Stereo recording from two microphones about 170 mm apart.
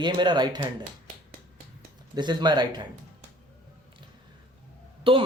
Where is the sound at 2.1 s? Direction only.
25° right (ahead or behind).